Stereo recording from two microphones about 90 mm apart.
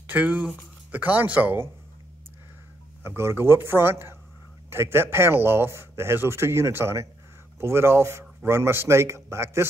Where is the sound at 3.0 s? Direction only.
30° right (ahead or behind).